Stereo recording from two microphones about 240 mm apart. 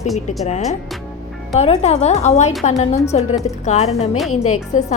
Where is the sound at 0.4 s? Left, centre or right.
Left.